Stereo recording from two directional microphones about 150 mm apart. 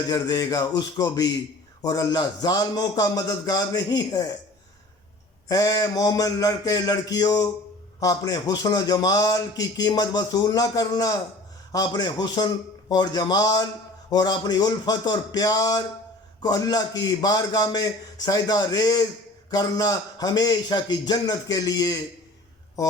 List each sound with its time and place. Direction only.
0.1 s a man's voice: 25° left (ahead or behind)
5.5 s a man's voice: 25° left (ahead or behind)